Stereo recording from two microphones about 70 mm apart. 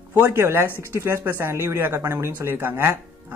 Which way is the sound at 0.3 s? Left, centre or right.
Right.